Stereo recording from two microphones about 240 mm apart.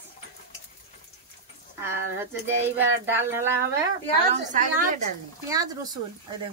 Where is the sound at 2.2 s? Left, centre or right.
Centre.